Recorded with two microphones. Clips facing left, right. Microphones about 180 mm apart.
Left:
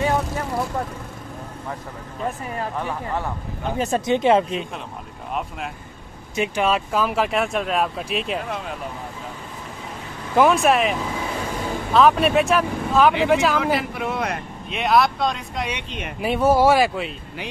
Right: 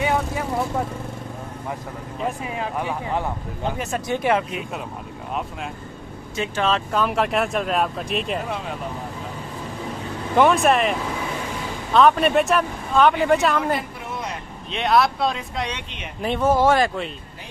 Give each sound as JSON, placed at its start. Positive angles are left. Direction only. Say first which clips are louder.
{"t": 2.2, "sound": "speech", "louder": "even", "side_deg": -10}
{"t": 3.7, "sound": "speech", "louder": "left 5 dB", "side_deg": 30}
{"t": 4.0, "sound": "speech", "louder": "left 4 dB", "side_deg": 20}
{"t": 6.3, "sound": "speech", "louder": "left 2 dB", "side_deg": 15}
{"t": 10.3, "sound": "speech", "louder": "even", "side_deg": 0}
{"t": 13.7, "sound": "a sound", "louder": "left 5 dB", "side_deg": 70}
{"t": 14.7, "sound": "speech", "louder": "even", "side_deg": 0}